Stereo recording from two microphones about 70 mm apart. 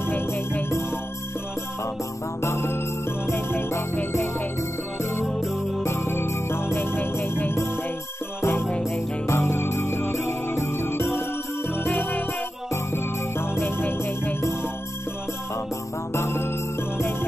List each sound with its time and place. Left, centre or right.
0.0 s music: left
2.4 s music: left
5.9 s music: left
8.6 s music: centre
9.3 s jingle bell: left
11.7 s music: left
16.1 s music: left